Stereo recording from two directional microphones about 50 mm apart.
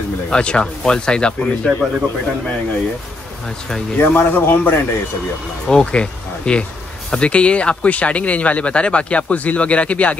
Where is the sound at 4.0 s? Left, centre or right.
Left.